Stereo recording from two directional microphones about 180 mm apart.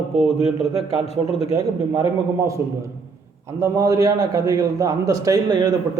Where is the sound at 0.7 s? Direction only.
30° left (ahead or behind).